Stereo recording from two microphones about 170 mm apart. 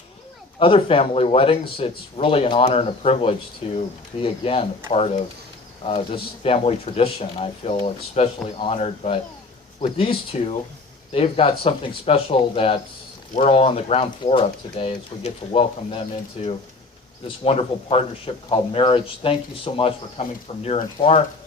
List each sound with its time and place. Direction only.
0.6 s speech: 35° left (ahead or behind)